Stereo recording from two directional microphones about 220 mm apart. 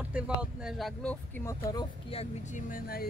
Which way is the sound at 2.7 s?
40° left (ahead or behind).